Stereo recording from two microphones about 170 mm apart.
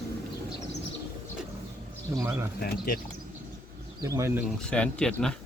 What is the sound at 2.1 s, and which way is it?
Speech, 15° right (ahead or behind).